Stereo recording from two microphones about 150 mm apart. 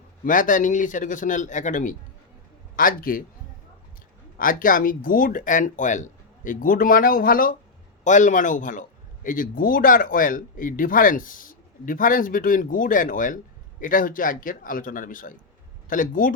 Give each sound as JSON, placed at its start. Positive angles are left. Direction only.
{"t": 0.3, "sound": "speech", "side_deg": 60}
{"t": 2.7, "sound": "a man's voice", "side_deg": 70}
{"t": 4.4, "sound": "speech", "side_deg": 65}
{"t": 8.0, "sound": "speech", "side_deg": 55}